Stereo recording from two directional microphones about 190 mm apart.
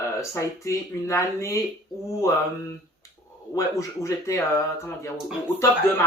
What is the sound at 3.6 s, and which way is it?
Speech, 15° left (ahead or behind).